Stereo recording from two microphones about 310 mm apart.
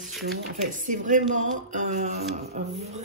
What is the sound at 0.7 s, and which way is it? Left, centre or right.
Speech, right.